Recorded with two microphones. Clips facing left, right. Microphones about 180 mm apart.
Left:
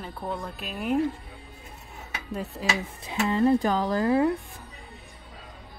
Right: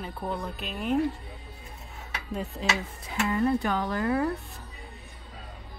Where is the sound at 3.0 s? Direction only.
25° left (ahead or behind).